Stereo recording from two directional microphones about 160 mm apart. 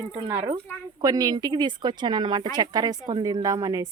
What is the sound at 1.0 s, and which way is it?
A woman's voice, 25° right (ahead or behind).